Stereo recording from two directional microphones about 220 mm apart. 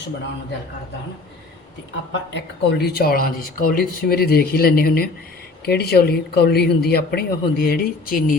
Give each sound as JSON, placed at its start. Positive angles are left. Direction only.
{"t": 2.3, "sound": "speech", "side_deg": 50}